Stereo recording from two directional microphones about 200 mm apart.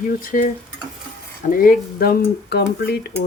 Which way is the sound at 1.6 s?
45° left (ahead or behind).